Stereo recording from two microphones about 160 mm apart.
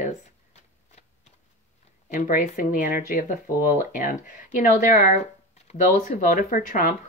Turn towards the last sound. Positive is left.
turn(degrees=60)  # may be behind; listen again after turning